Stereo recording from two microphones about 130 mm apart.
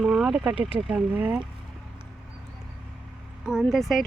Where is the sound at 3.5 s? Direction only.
Centre (ahead or behind).